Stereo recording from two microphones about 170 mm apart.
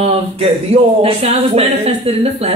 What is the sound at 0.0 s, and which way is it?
A man's voice, 35° right (ahead or behind).